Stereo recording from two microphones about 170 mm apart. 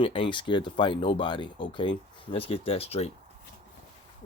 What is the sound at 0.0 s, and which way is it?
Speech, 30° left (ahead or behind).